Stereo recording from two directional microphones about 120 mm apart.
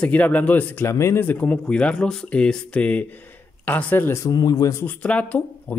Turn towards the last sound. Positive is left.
turn(degrees=15)  # may be behind; listen again after turning